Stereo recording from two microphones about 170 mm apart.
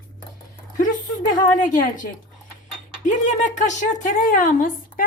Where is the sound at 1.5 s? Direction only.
50° left (ahead or behind).